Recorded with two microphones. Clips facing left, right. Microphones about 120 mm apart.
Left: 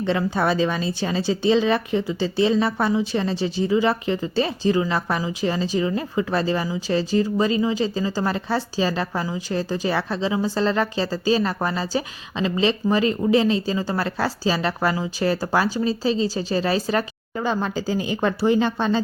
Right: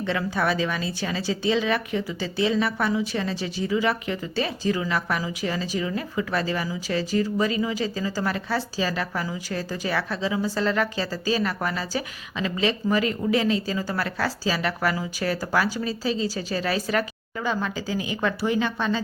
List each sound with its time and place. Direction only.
0.0 s speech: 30° left (ahead or behind)